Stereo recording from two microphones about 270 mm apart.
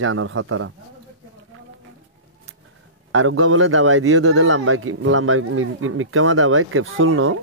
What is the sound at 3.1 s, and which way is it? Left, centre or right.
A man's voice, right.